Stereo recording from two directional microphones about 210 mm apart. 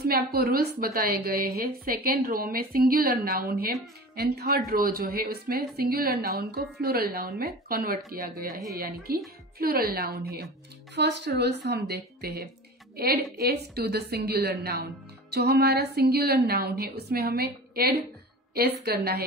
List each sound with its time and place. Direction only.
0.0 s a woman's voice: 45° right (ahead or behind)